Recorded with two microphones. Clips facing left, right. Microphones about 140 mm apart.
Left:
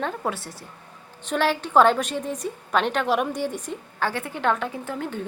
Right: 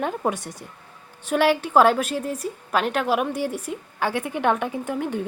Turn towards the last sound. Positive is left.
turn(degrees=-15)  # may be behind; listen again after turning